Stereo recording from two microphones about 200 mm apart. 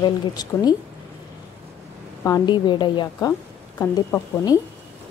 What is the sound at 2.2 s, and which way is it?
A woman's voice, 20° left (ahead or behind).